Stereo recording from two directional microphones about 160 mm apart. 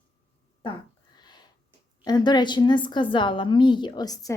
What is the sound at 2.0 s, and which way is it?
A woman's voice, 25° left (ahead or behind).